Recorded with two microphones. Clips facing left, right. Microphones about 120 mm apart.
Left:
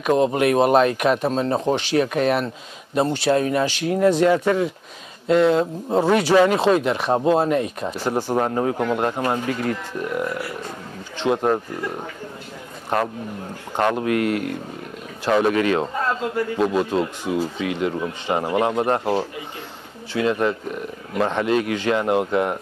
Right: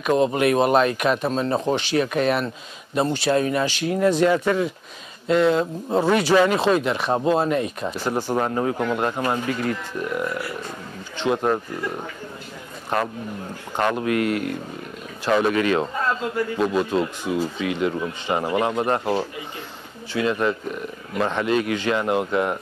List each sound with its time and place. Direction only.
0.1 s speech: 45° left (ahead or behind)
4.2 s speech: 40° left (ahead or behind)
5.9 s speech: 25° left (ahead or behind)
6.1 s speech: 40° left (ahead or behind)
7.8 s speech: 25° left (ahead or behind); by 12.0 s 40° left (ahead or behind)
14.0 s speech: 50° left (ahead or behind)
15.2 s speech: 40° left (ahead or behind)
17.2 s speech: 50° left (ahead or behind)